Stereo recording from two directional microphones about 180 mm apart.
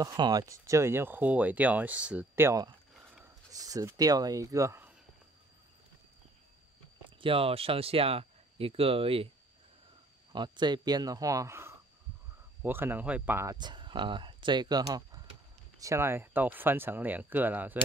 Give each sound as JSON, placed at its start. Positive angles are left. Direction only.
{"t": 0.0, "sound": "speech", "side_deg": -20}
{"t": 7.2, "sound": "speech", "side_deg": -30}
{"t": 10.3, "sound": "speech", "side_deg": -25}
{"t": 13.6, "sound": "speech", "side_deg": -25}